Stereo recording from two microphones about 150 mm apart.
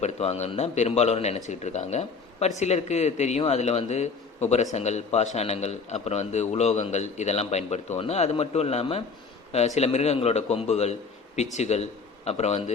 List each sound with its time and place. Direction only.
0.0 s speech: 45° left (ahead or behind)